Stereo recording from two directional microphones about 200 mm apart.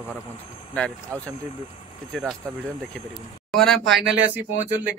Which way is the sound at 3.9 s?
60° right (ahead or behind).